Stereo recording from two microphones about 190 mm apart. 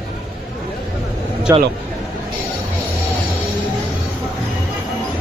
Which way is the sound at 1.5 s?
15° right (ahead or behind).